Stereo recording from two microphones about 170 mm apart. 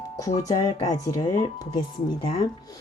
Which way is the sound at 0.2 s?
20° left (ahead or behind).